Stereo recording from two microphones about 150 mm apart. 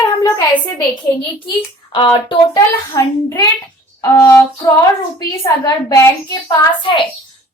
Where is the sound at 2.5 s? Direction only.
20° left (ahead or behind).